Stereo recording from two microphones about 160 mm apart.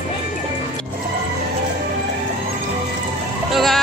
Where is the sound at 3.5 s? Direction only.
Centre (ahead or behind).